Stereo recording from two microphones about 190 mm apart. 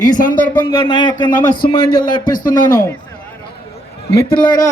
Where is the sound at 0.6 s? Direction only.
25° left (ahead or behind).